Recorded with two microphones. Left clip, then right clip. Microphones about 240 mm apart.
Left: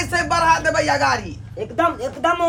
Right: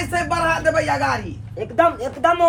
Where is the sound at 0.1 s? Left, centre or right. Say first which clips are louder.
Left 4 dB; centre.